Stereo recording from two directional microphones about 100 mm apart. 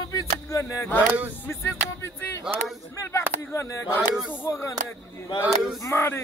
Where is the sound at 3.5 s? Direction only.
30° left (ahead or behind).